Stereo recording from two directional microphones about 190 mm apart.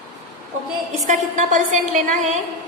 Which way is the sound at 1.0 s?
40° right (ahead or behind).